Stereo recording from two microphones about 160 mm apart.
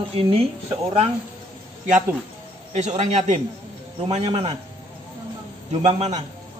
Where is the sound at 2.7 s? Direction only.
45° right (ahead or behind).